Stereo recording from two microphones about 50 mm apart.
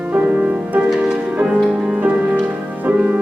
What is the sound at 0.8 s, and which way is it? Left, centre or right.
Music, centre.